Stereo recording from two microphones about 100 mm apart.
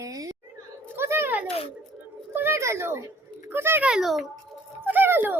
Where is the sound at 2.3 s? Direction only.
25° right (ahead or behind).